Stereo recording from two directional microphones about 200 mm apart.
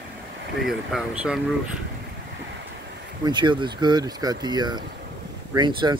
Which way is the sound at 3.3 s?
20° right (ahead or behind).